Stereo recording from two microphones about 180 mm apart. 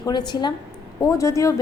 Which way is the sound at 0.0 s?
25° left (ahead or behind).